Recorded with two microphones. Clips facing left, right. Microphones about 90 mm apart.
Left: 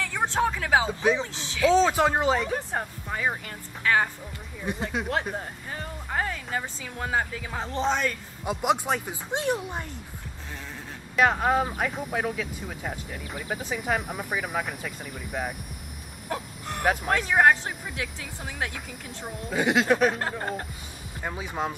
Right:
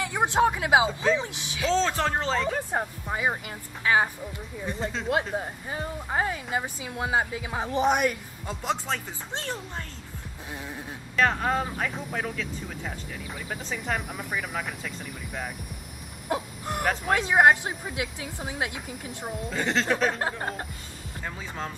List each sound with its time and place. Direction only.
0.0 s speech: 15° right (ahead or behind)
1.7 s speech: 15° left (ahead or behind)
2.7 s speech: 10° right (ahead or behind)
4.7 s speech: 15° left (ahead or behind)
5.3 s speech: 15° right (ahead or behind)
8.5 s speech: 15° left (ahead or behind)
11.1 s speech: 10° left (ahead or behind)
16.3 s a sound: 15° right (ahead or behind)
16.8 s speech: 10° left (ahead or behind)
17.1 s speech: 15° right (ahead or behind)
19.5 s speech: 10° left (ahead or behind)
20.2 s speech: 10° right (ahead or behind)
21.2 s speech: 15° left (ahead or behind)